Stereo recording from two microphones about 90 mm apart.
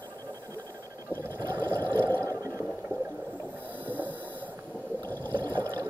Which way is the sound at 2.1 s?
40° right (ahead or behind).